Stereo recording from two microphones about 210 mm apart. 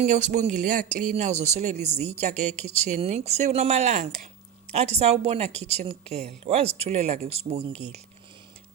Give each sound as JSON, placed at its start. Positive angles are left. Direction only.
{"t": 0.0, "sound": "a woman's voice", "side_deg": -35}